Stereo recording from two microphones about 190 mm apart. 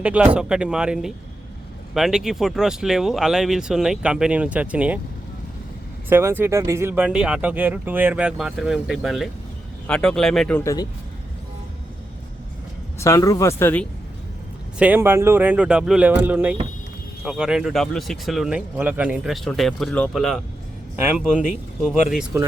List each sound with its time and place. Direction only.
0.0 s speech: 5° right (ahead or behind)
6.1 s speech: 10° right (ahead or behind)
10.6 s speech: 15° left (ahead or behind)
13.0 s speech: 15° left (ahead or behind)
14.8 s speech: 10° right (ahead or behind)